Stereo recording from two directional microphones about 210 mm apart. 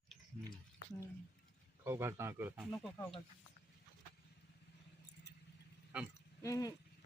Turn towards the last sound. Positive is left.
turn(degrees=15)  # may be behind; listen again after turning